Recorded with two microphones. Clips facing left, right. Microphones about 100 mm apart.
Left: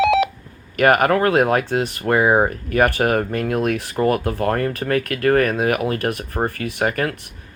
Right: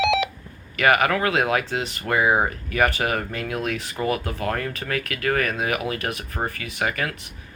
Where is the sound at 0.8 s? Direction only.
45° left (ahead or behind).